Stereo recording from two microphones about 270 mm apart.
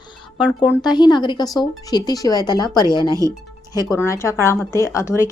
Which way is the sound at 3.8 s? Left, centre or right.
Centre.